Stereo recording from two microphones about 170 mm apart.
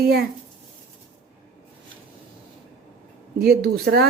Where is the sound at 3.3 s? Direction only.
70° right (ahead or behind).